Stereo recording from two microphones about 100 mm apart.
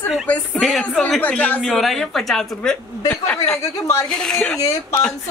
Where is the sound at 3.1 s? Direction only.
15° left (ahead or behind).